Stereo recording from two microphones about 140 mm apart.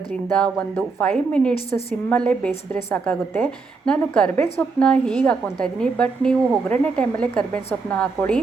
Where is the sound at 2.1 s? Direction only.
5° left (ahead or behind).